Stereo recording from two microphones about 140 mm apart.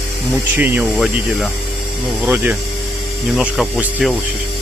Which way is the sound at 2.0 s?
10° right (ahead or behind).